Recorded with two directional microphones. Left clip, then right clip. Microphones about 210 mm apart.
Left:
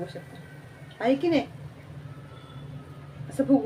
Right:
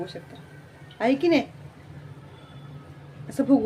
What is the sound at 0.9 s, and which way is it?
Speech, 25° right (ahead or behind).